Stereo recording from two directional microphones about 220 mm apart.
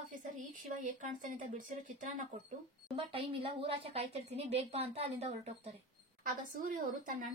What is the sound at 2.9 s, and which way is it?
A woman's voice, 25° right (ahead or behind).